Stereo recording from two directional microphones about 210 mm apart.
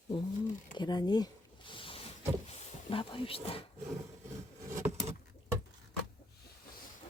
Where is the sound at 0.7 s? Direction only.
20° left (ahead or behind).